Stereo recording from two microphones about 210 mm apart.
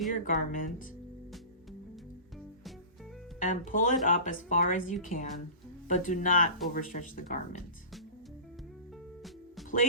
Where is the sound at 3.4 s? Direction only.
40° left (ahead or behind).